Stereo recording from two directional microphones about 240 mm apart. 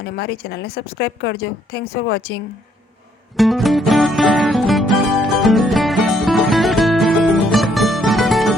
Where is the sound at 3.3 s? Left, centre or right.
Centre.